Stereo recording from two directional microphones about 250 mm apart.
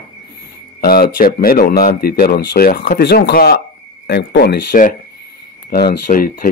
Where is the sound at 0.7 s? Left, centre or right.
Left.